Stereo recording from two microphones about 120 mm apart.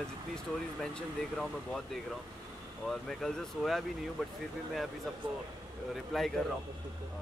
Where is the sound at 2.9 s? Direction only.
5° left (ahead or behind).